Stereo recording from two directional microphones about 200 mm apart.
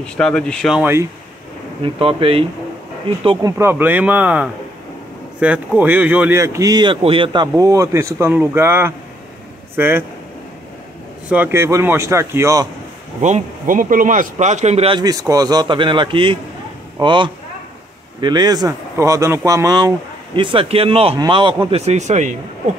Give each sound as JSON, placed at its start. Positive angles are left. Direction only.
{"t": 0.0, "sound": "speech", "side_deg": 5}
{"t": 2.0, "sound": "speech", "side_deg": -25}
{"t": 3.3, "sound": "speech", "side_deg": -15}
{"t": 11.2, "sound": "speech", "side_deg": -10}
{"t": 13.2, "sound": "speech", "side_deg": -40}